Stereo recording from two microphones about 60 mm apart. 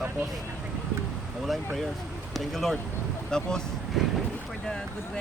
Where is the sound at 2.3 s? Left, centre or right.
Centre.